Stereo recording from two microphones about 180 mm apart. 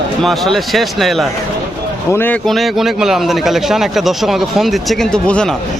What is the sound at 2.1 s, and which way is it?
Speech, 10° left (ahead or behind).